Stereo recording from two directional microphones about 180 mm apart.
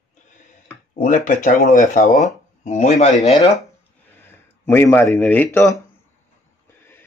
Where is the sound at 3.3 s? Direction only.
20° left (ahead or behind).